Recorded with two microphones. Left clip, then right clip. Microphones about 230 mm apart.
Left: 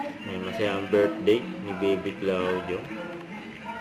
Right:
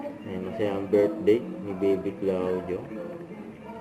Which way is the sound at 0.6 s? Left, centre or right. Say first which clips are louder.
Even; centre.